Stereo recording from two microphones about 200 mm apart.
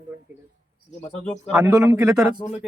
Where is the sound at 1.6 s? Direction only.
15° right (ahead or behind).